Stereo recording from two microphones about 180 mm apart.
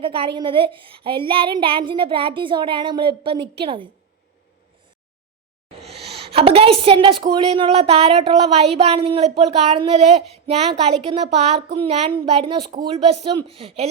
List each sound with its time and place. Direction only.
0.0 s a woman's voice: 30° right (ahead or behind)
6.3 s a woman's voice: 30° right (ahead or behind)